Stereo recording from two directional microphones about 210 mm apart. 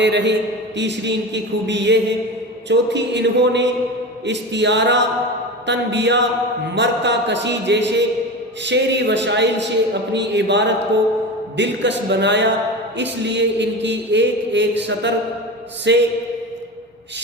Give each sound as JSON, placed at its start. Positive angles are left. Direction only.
{"t": 0.0, "sound": "a man's voice", "side_deg": -55}